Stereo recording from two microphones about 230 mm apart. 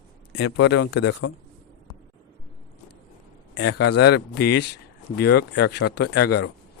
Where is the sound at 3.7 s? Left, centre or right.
Left.